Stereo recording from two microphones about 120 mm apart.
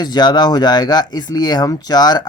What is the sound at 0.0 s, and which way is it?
Speech, 35° left (ahead or behind).